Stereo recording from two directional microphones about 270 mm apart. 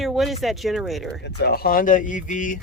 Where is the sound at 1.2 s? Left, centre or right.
Left.